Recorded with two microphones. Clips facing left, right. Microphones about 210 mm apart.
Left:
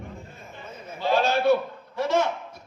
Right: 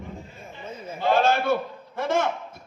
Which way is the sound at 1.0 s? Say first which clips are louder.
Even; 50° right (ahead or behind).